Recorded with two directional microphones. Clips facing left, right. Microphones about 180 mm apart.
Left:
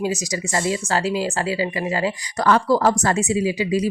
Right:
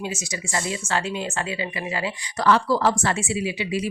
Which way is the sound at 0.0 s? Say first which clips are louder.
Left 7 dB; 35° left (ahead or behind).